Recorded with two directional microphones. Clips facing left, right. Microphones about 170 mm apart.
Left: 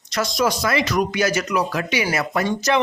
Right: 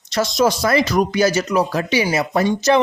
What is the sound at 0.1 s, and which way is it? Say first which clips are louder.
Speech: right 4 dB; 25° right (ahead or behind).